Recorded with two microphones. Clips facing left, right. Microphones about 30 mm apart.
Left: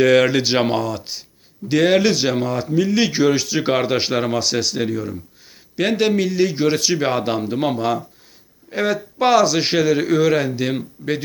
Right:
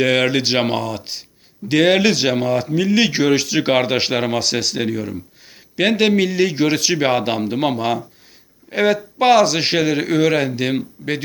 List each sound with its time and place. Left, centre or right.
0.0 s speech: right
2.3 s a man's voice: right
2.7 s speech: right
3.7 s a man's voice: right
5.7 s a man's voice: right
6.9 s a man's voice: right
8.7 s a man's voice: right
10.7 s speech: right